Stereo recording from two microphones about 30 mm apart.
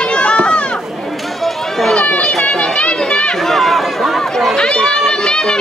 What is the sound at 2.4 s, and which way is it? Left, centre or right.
Children playing, left.